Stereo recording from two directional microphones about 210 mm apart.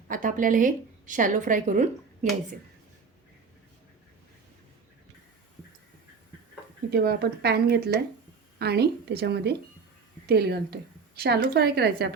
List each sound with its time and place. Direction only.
0.1 s a woman's voice: 40° right (ahead or behind)
6.9 s a woman's voice: 50° right (ahead or behind)